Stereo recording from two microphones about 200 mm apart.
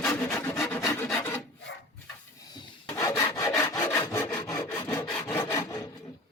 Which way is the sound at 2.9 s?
15° left (ahead or behind).